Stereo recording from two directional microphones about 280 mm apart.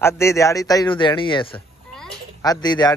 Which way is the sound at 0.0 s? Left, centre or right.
Centre.